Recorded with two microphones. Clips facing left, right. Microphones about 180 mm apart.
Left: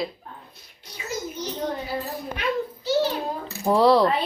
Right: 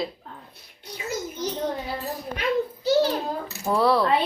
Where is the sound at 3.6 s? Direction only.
20° left (ahead or behind).